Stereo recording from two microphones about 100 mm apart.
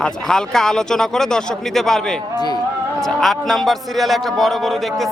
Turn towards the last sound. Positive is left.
turn(degrees=0)  # may be behind; listen again after turning